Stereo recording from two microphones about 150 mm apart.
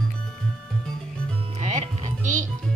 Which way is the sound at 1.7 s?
55° right (ahead or behind).